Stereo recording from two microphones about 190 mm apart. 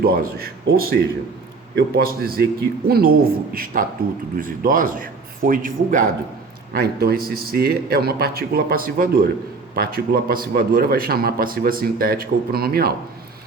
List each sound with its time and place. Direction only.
0.0 s a man's voice: 50° right (ahead or behind)